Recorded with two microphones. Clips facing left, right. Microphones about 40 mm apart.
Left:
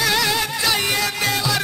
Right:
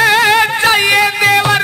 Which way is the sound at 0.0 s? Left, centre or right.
Right.